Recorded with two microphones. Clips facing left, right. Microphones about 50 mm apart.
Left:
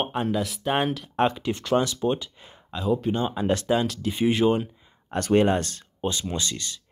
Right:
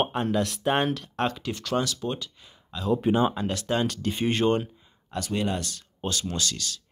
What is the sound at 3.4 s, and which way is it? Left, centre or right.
Speech, left.